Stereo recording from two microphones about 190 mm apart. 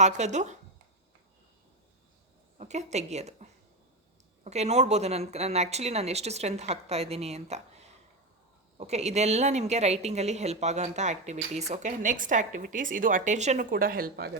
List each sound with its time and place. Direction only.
0.0 s speech: 40° right (ahead or behind)
2.6 s speech: 35° right (ahead or behind); by 14.3 s 50° right (ahead or behind)